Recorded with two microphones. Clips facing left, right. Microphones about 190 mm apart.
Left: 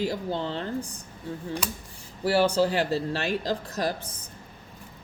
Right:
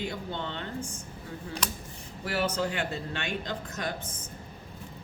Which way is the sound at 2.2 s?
30° left (ahead or behind).